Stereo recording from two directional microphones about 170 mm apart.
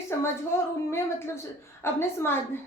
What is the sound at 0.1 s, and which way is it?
Speech, 15° left (ahead or behind).